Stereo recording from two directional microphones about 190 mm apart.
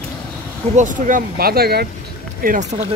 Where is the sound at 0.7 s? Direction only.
45° right (ahead or behind).